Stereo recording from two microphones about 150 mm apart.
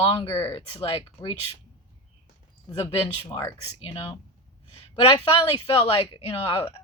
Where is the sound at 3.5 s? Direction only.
35° left (ahead or behind).